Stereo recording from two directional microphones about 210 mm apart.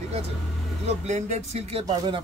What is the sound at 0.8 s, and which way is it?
Speech, 35° right (ahead or behind).